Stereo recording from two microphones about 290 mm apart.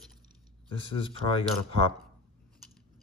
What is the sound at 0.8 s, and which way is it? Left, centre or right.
Speech, centre.